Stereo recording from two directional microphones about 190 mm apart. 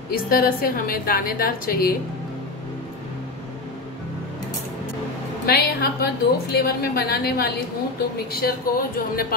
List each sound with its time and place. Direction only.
0.1 s a woman's voice: 50° left (ahead or behind)
5.5 s a woman's voice: 55° left (ahead or behind)